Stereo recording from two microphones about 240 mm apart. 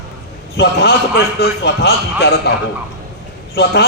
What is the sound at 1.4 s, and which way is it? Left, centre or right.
A man's voice, left.